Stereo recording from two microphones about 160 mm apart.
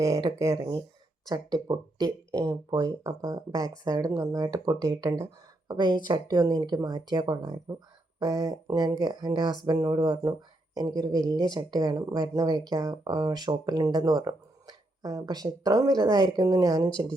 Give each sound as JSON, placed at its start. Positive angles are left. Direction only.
{"t": 0.0, "sound": "speech", "side_deg": -20}
{"t": 0.5, "sound": "speech", "side_deg": -30}